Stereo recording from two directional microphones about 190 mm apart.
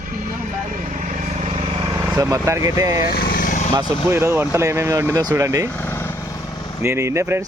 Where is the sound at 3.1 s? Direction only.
50° left (ahead or behind).